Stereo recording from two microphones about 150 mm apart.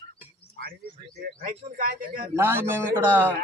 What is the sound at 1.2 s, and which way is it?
A man's voice, 75° right (ahead or behind).